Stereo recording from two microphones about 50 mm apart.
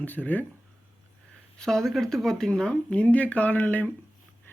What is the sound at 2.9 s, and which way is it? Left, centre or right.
Speech, left.